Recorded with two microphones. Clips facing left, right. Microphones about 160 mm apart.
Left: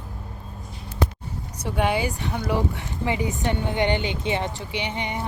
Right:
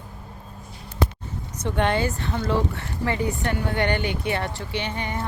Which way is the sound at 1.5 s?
10° left (ahead or behind).